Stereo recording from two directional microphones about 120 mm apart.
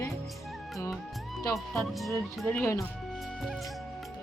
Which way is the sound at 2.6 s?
25° left (ahead or behind).